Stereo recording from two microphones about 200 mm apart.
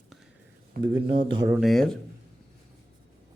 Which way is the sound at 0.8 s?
25° right (ahead or behind).